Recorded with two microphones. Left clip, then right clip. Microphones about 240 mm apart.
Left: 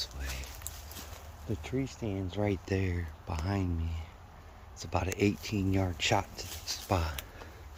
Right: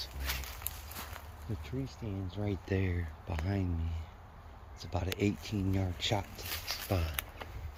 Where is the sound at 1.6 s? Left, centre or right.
Centre.